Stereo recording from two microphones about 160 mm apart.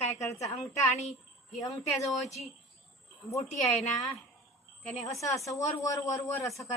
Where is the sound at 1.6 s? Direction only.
20° left (ahead or behind).